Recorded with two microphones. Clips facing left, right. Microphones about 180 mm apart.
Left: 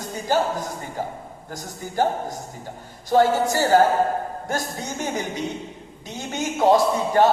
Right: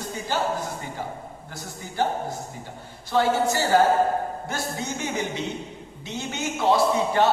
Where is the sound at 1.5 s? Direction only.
45° left (ahead or behind).